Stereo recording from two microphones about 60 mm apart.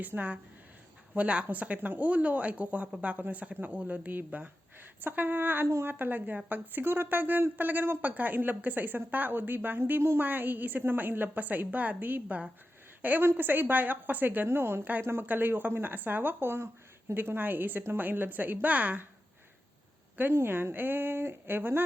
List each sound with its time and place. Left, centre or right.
0.0 s a woman's voice: right
15.3 s a woman's voice: right
20.3 s a woman's voice: right